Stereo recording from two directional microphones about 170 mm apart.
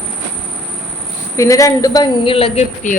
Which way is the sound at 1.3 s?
20° left (ahead or behind).